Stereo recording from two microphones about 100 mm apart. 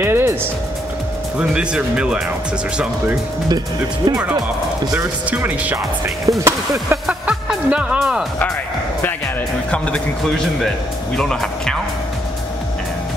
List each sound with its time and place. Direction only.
0.0 s music: 25° right (ahead or behind)
1.4 s speech: 10° right (ahead or behind)
3.4 s speech: 40° right (ahead or behind)
4.9 s speech: 15° right (ahead or behind)
6.0 s speech: 30° right (ahead or behind)
7.1 s music: 10° right (ahead or behind)
9.7 s speech: 10° left (ahead or behind)